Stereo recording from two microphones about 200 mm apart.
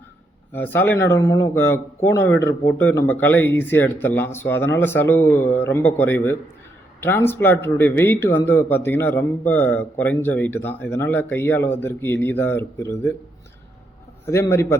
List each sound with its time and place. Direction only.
0.5 s speech: 10° left (ahead or behind)
14.3 s speech: 15° left (ahead or behind)